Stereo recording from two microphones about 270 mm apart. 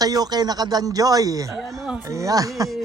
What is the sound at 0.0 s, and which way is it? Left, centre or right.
Speech, centre.